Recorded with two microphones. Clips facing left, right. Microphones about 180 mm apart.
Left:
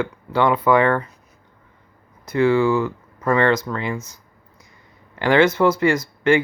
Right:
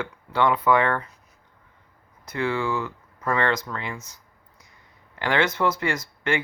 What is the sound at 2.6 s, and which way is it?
Speech, 35° left (ahead or behind).